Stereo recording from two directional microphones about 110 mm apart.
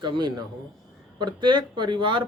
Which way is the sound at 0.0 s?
45° right (ahead or behind).